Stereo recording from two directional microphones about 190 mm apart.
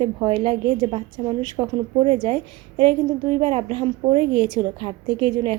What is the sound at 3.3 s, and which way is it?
A woman's voice, 30° right (ahead or behind).